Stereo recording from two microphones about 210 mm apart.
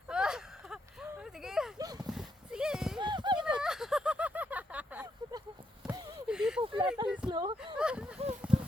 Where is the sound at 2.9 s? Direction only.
20° right (ahead or behind).